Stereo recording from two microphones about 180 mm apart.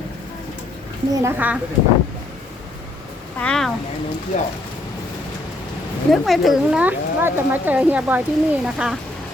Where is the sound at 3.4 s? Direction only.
5° left (ahead or behind).